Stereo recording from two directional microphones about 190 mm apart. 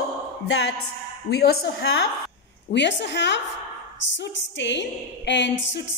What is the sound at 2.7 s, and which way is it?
A woman's voice, 65° left (ahead or behind).